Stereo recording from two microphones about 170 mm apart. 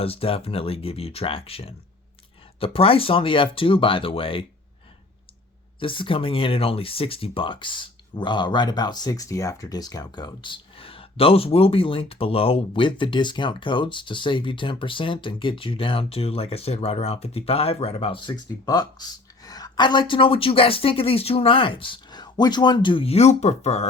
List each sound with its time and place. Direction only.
0.0 s speech: 35° left (ahead or behind)
5.8 s speech: 30° left (ahead or behind)